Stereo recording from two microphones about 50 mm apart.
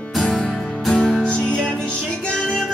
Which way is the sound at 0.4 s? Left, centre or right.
Centre.